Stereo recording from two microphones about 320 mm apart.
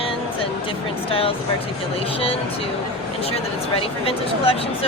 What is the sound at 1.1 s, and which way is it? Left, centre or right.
Speech, centre.